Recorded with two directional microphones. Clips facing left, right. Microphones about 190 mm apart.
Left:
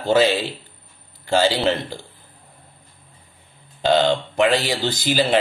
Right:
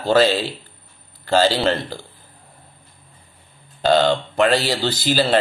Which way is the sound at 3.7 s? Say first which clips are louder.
Right 1 dB; 15° left (ahead or behind).